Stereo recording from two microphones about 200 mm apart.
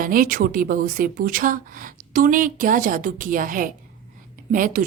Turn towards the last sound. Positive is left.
turn(degrees=-45)  # may be behind; listen again after turning